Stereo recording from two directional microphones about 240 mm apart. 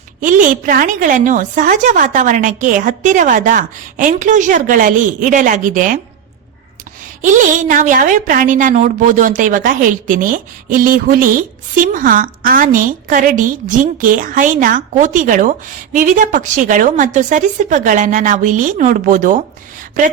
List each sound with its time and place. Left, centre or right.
0.2 s a woman's voice: right
7.2 s a woman's voice: right